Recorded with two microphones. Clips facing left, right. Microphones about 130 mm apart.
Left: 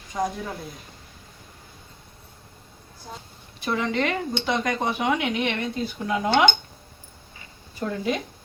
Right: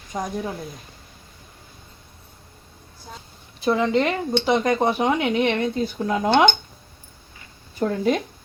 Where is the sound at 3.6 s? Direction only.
30° right (ahead or behind).